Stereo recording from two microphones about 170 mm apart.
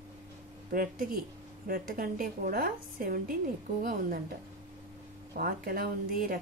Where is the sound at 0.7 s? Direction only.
60° right (ahead or behind).